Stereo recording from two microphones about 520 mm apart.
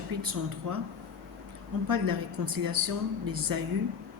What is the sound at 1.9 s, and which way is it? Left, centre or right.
A woman's voice, right.